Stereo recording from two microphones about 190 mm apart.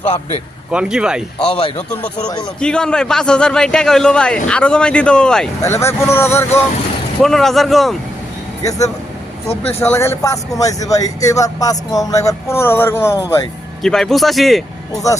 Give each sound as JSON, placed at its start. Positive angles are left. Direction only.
{"t": 0.7, "sound": "a man's voice", "side_deg": -5}
{"t": 1.5, "sound": "a man's voice", "side_deg": 30}
{"t": 2.6, "sound": "a man's voice", "side_deg": 5}
{"t": 7.2, "sound": "a man's voice", "side_deg": 0}
{"t": 9.8, "sound": "a man's voice", "side_deg": 15}